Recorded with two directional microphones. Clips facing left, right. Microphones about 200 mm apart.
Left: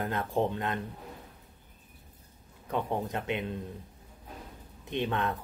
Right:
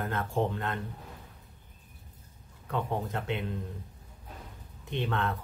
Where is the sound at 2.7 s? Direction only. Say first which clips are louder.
Left 1 dB; 15° left (ahead or behind).